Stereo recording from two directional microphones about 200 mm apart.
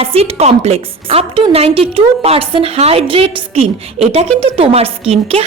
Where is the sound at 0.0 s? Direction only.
30° right (ahead or behind).